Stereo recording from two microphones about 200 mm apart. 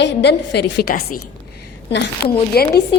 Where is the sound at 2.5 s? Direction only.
50° left (ahead or behind).